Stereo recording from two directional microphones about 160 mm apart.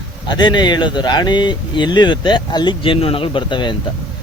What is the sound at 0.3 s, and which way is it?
Speech, 30° left (ahead or behind).